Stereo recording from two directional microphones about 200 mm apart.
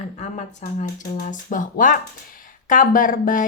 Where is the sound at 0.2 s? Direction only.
35° left (ahead or behind).